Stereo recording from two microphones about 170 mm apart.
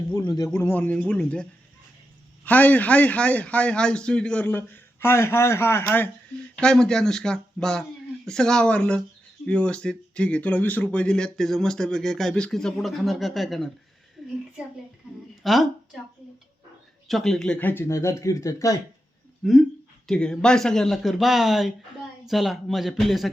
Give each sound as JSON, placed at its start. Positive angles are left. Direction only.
{"t": 0.1, "sound": "a man's voice", "side_deg": 20}
{"t": 15.4, "sound": "speech", "side_deg": 0}
{"t": 17.1, "sound": "a man's voice", "side_deg": 0}
{"t": 19.4, "sound": "speech", "side_deg": 0}